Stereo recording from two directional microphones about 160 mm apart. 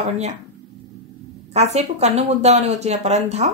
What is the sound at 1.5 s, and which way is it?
Speech, 45° right (ahead or behind).